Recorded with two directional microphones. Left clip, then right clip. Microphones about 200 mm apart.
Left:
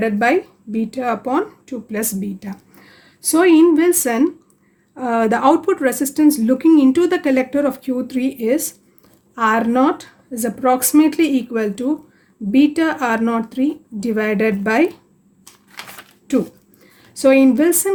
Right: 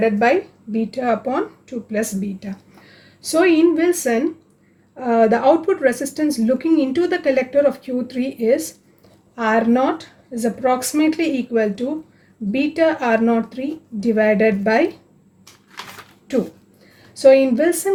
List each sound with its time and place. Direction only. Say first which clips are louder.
0.0 s a woman's voice: even; 45° left (ahead or behind)
17.2 s speech: right 1 dB; 50° left (ahead or behind)